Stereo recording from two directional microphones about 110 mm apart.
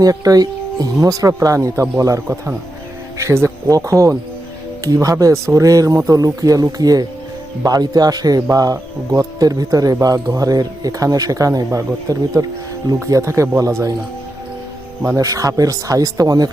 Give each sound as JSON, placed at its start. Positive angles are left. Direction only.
{"t": 0.0, "sound": "speech", "side_deg": -35}
{"t": 15.0, "sound": "speech", "side_deg": -30}